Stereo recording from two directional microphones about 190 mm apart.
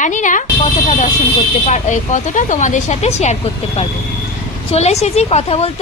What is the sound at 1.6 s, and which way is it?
A woman's voice, 40° left (ahead or behind).